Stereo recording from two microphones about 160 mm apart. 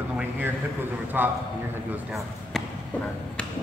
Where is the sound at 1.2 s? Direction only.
10° right (ahead or behind).